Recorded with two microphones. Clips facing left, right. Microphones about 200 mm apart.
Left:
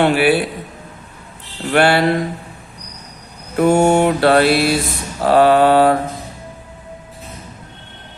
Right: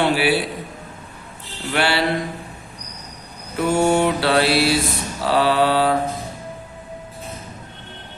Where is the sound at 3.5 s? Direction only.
50° left (ahead or behind).